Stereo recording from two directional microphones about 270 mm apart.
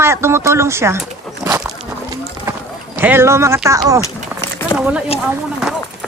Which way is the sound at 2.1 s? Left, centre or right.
Centre.